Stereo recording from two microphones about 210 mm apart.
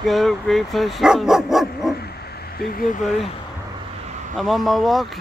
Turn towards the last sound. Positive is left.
turn(degrees=0)  # may be behind; listen again after turning